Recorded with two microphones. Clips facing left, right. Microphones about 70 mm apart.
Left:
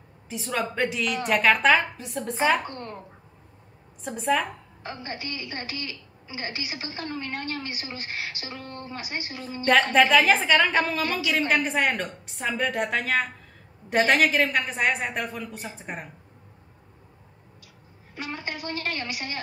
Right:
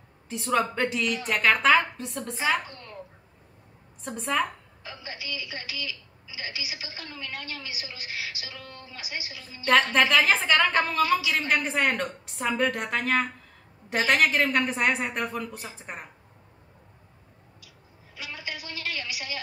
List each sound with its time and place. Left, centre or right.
0.3 s a woman's voice: centre
2.6 s a woman's voice: left
4.0 s a woman's voice: centre
4.8 s a woman's voice: left
9.9 s a woman's voice: centre
18.1 s a woman's voice: left